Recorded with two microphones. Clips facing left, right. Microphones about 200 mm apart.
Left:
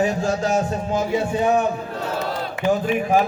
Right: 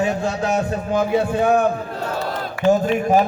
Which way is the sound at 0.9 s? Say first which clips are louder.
Right 5 dB; 60° right (ahead or behind).